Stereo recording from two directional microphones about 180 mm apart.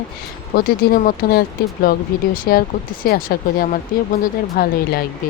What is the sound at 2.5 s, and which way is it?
Speech, 60° left (ahead or behind).